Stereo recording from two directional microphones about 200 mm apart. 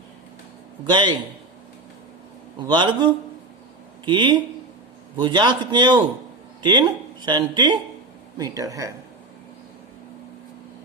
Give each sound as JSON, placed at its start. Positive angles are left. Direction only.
{"t": 0.9, "sound": "speech", "side_deg": -20}
{"t": 2.6, "sound": "speech", "side_deg": -20}